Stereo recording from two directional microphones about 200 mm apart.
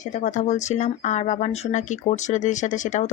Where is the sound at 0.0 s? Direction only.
40° left (ahead or behind).